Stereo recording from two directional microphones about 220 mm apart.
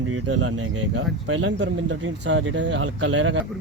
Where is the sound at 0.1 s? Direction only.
65° right (ahead or behind).